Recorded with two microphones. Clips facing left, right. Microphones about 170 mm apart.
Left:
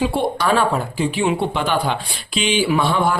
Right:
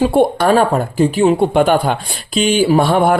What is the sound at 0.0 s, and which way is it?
A woman's voice, 50° right (ahead or behind).